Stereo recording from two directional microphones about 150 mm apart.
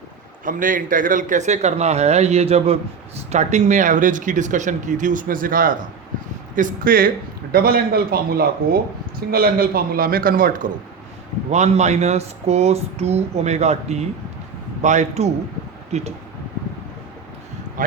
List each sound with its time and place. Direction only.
0.4 s a man's voice: 65° right (ahead or behind)
11.5 s speech: 50° right (ahead or behind)
17.8 s speech: 65° right (ahead or behind)